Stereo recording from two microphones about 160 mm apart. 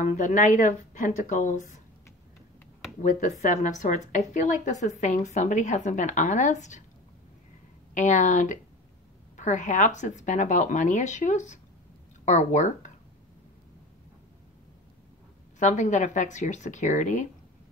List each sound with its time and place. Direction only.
0.1 s a woman's voice: 50° left (ahead or behind)
3.0 s a woman's voice: 50° left (ahead or behind)
7.9 s a woman's voice: 50° left (ahead or behind)
15.6 s a woman's voice: 50° left (ahead or behind)